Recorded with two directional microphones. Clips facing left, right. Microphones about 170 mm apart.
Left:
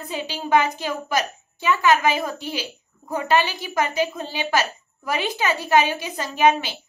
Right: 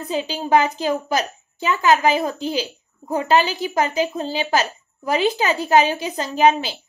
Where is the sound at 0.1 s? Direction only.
35° right (ahead or behind).